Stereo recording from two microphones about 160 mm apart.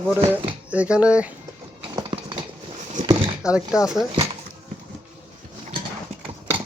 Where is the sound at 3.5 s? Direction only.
5° right (ahead or behind).